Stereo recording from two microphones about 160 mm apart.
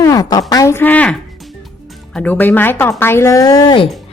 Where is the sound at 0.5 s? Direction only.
15° left (ahead or behind).